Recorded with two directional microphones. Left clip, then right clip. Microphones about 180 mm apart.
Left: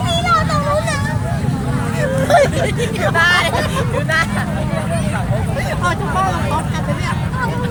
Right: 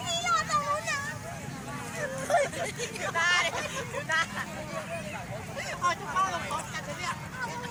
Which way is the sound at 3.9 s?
50° left (ahead or behind).